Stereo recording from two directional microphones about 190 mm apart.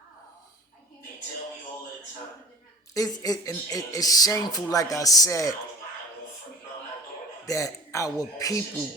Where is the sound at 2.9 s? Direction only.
20° left (ahead or behind).